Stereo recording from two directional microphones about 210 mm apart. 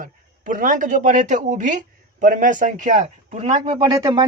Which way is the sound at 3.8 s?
15° right (ahead or behind).